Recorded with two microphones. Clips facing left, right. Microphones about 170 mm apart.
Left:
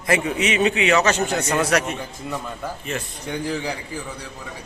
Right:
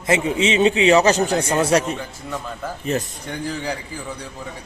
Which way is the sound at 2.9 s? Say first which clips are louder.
Right 7 dB; 35° right (ahead or behind).